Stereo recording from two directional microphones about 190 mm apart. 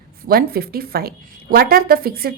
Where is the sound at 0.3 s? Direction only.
55° right (ahead or behind).